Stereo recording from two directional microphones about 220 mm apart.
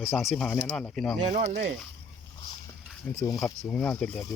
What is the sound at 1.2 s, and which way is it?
Speech, 30° right (ahead or behind).